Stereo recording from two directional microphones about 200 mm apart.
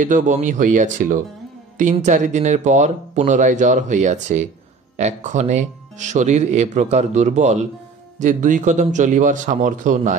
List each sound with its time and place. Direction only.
0.0 s speech: 40° right (ahead or behind)